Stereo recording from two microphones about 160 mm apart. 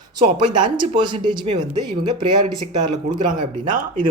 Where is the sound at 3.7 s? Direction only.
60° right (ahead or behind).